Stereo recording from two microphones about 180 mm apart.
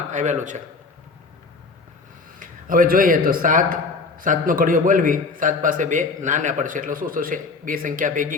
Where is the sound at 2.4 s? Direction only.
50° right (ahead or behind).